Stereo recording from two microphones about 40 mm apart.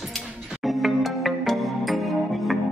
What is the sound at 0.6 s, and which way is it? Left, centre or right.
Music, centre.